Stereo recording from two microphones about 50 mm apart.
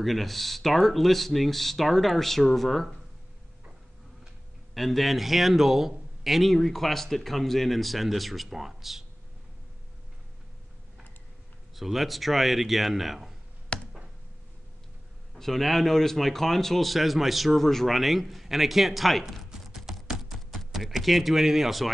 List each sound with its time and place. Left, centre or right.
0.0 s a man's voice: centre
4.7 s a man's voice: centre
11.7 s a man's voice: centre
13.7 s a sound: left
15.3 s a man's voice: centre
19.5 s typing: centre